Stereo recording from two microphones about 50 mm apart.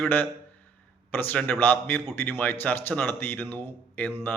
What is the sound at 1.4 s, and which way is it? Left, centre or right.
A man's voice, left.